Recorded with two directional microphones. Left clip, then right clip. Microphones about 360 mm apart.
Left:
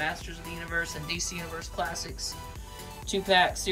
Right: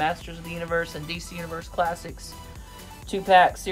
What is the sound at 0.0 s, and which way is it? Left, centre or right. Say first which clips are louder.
Speech: right 6 dB; centre.